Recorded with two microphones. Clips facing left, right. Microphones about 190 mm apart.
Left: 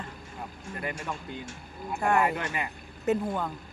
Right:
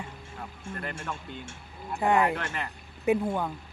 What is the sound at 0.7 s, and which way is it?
Speech, 10° left (ahead or behind).